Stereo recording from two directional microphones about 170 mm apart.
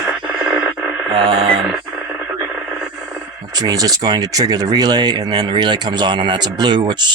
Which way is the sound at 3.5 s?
25° right (ahead or behind).